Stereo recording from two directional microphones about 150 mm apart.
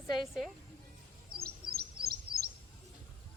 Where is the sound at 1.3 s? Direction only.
90° right.